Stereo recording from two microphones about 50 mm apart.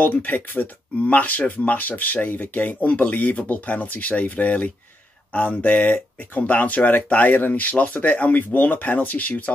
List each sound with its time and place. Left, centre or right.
0.0 s speech: left